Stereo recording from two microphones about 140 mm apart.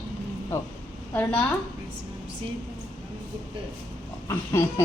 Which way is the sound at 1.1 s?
10° left (ahead or behind).